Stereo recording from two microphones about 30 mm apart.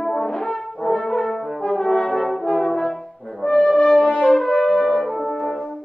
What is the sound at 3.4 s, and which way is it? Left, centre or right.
French horn, left.